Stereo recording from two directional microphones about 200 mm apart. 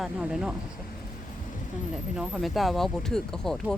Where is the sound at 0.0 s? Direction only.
5° right (ahead or behind).